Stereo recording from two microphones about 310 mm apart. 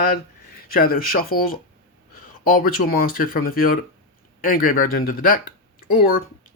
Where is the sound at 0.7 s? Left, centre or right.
Left.